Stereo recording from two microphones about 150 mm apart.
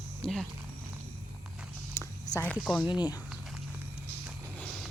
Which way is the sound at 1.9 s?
15° left (ahead or behind).